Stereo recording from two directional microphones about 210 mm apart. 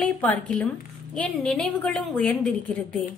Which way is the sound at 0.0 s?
5° left (ahead or behind).